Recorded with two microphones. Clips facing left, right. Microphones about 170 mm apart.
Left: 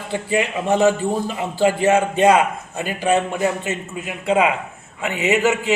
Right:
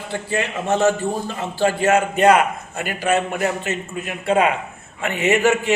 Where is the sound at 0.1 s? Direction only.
15° left (ahead or behind).